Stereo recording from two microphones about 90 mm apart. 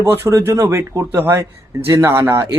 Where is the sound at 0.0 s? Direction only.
25° right (ahead or behind).